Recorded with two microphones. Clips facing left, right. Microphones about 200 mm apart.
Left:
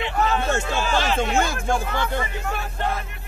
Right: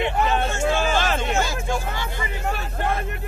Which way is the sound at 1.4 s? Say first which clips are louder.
Left 2 dB; 55° left (ahead or behind).